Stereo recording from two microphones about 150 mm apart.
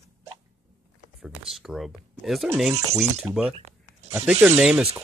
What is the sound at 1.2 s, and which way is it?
Speech, 5° right (ahead or behind).